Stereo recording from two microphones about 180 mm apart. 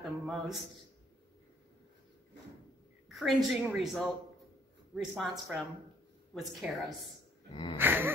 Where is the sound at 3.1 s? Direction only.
Centre (ahead or behind).